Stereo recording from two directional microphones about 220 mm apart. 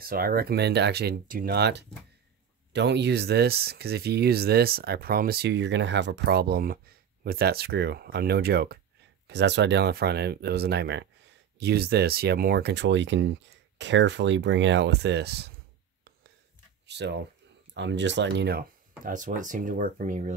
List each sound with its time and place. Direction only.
0.0 s speech: 40° right (ahead or behind)
16.8 s speech: 50° right (ahead or behind); by 20.3 s 35° right (ahead or behind)